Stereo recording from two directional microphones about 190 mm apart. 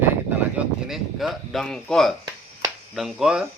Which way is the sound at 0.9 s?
Centre (ahead or behind).